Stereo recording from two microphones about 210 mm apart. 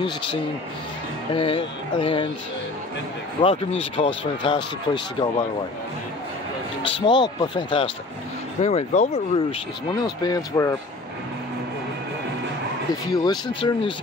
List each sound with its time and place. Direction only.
1.3 s speech: 25° left (ahead or behind)
3.4 s speech: 25° left (ahead or behind)
6.8 s speech: 25° left (ahead or behind)
13.1 s speech: 20° left (ahead or behind)